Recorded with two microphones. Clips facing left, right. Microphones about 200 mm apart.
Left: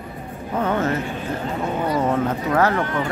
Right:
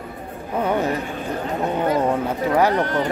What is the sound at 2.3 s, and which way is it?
Speech, 15° right (ahead or behind).